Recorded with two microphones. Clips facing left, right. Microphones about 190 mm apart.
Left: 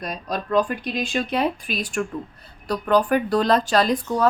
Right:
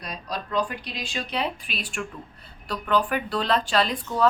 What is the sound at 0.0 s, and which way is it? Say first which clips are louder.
Speech: left 5 dB; 50° left (ahead or behind).